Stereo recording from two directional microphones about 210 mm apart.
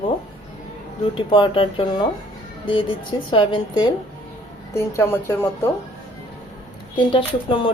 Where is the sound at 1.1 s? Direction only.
25° left (ahead or behind).